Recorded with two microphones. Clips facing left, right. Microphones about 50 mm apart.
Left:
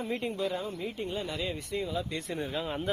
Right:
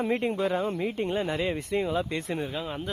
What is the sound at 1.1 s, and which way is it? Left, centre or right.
Speech, right.